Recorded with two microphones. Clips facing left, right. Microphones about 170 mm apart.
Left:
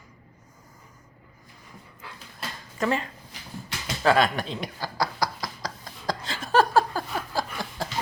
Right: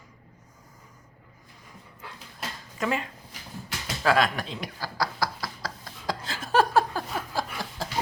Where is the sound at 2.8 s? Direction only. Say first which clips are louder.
Left 2 dB; 5° right (ahead or behind).